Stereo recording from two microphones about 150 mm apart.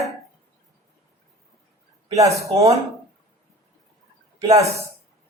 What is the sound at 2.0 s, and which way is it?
Speech, 20° right (ahead or behind).